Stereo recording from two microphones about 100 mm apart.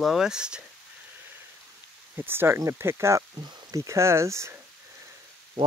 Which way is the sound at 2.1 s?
20° right (ahead or behind).